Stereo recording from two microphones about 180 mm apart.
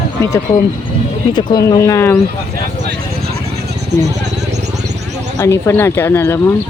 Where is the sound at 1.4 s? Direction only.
20° left (ahead or behind).